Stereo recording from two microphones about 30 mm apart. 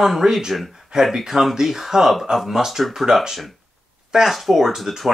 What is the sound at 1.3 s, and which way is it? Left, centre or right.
Speech, centre.